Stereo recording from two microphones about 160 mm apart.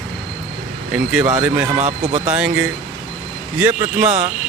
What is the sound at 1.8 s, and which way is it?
Speech, 45° right (ahead or behind).